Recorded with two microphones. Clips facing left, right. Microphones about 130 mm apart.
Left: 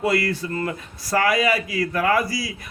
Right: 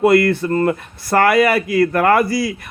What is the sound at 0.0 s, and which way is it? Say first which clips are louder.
Speech: right 9 dB; 55° right (ahead or behind).